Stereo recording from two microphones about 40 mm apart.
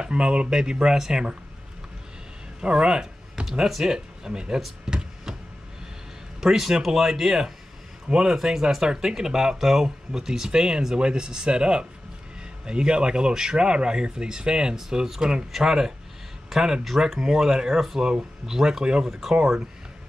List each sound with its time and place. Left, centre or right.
0.0 s speech: right
2.6 s a sound: right
3.4 s speech: centre
4.8 s a sound: centre
6.4 s speech: centre
19.0 s speech: centre